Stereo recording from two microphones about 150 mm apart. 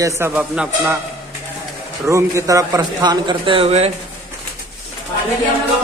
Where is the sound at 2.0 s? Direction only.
20° right (ahead or behind); by 3.9 s 45° right (ahead or behind).